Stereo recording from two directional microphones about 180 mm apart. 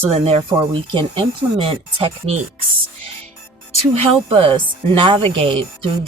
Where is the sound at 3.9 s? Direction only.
35° right (ahead or behind).